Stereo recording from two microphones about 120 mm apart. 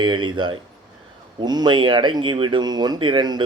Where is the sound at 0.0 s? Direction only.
40° right (ahead or behind).